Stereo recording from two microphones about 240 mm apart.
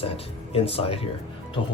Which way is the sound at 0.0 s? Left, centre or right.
Left.